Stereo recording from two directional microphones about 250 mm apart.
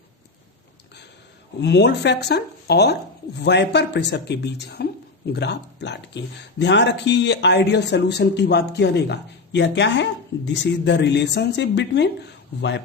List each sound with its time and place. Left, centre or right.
1.6 s speech: left